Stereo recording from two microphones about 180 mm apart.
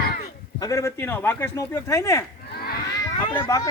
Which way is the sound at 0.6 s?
20° left (ahead or behind).